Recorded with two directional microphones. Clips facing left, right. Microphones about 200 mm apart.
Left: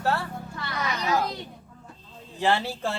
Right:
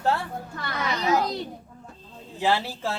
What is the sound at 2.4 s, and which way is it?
Speech, 5° right (ahead or behind).